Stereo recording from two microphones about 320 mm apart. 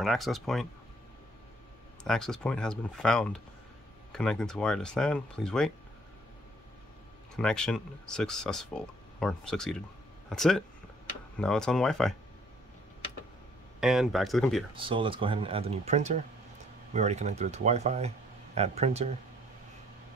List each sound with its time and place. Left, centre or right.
0.0 s speech: centre
2.0 s speech: centre
7.3 s speech: centre
13.7 s speech: centre
14.7 s speech: centre